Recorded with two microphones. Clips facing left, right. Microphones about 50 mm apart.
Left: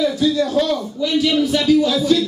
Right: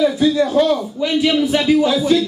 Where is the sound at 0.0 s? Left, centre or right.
Right.